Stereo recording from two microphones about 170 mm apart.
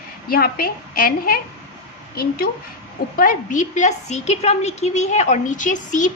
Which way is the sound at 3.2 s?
50° left (ahead or behind).